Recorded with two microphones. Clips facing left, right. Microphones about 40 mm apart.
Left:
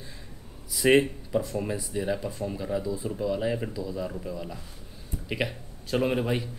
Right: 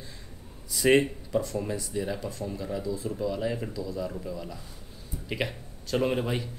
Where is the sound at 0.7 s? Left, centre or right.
Centre.